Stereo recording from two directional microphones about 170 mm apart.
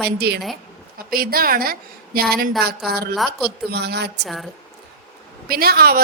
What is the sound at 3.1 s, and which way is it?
Speech, centre (ahead or behind).